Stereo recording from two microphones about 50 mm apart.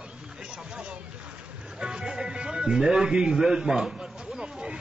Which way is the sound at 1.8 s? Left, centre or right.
Centre.